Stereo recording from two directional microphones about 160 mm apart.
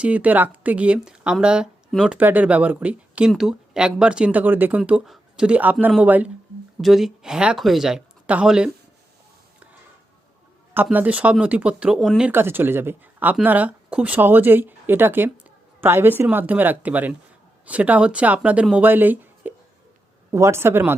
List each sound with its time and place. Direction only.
0.0 s speech: 10° right (ahead or behind)
10.9 s speech: 10° right (ahead or behind)